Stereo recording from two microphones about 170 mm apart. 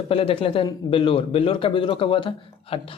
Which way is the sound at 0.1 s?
35° left (ahead or behind).